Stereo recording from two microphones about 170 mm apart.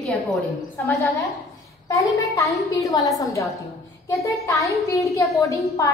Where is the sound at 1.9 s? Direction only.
20° left (ahead or behind).